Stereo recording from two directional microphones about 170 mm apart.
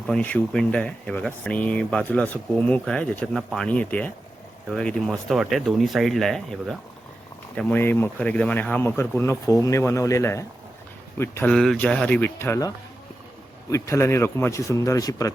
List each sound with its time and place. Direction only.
0.1 s speech: 10° left (ahead or behind)
11.5 s speech: centre (ahead or behind); by 15.3 s 20° left (ahead or behind)